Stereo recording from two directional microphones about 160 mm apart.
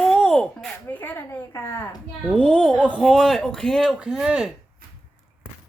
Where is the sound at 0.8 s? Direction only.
10° left (ahead or behind).